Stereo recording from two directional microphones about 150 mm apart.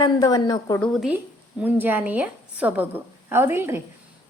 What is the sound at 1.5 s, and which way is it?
A woman's voice, 10° right (ahead or behind).